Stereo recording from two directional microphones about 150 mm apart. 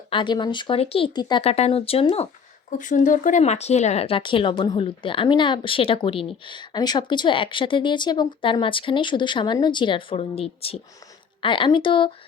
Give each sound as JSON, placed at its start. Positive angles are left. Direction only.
{"t": 0.1, "sound": "speech", "side_deg": 30}
{"t": 2.6, "sound": "speech", "side_deg": 60}